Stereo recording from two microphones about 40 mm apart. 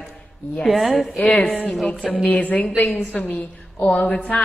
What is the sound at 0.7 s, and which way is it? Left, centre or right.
Speech, centre.